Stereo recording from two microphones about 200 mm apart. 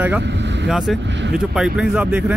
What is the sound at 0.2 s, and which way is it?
Speech, 60° right (ahead or behind).